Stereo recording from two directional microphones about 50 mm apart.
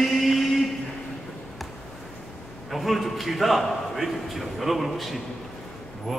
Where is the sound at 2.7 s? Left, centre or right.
Centre.